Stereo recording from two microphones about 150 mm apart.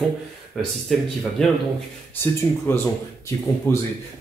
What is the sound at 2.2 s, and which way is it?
Speech, 15° left (ahead or behind).